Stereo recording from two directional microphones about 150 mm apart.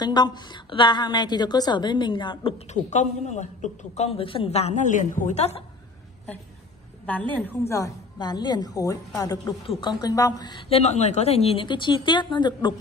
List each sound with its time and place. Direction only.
0.0 s a woman's voice: 30° left (ahead or behind)
2.7 s a woman's voice: 50° left (ahead or behind)
7.1 s a woman's voice: 10° left (ahead or behind); by 10.6 s 25° left (ahead or behind)
10.7 s a woman's voice: 50° left (ahead or behind); by 12.7 s 30° left (ahead or behind)